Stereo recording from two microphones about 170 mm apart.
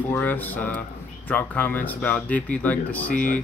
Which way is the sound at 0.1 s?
10° left (ahead or behind).